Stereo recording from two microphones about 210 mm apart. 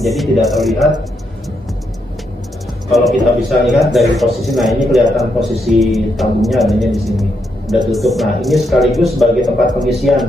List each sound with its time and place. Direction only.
0.0 s speech: centre (ahead or behind)
2.9 s speech: centre (ahead or behind)